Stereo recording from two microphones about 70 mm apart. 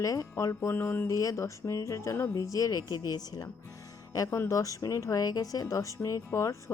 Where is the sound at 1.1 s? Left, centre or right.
Left.